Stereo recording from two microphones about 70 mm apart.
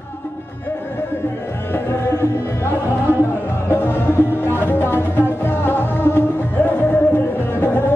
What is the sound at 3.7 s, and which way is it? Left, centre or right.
Music, left.